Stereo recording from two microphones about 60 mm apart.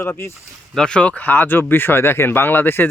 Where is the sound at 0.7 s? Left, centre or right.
Centre.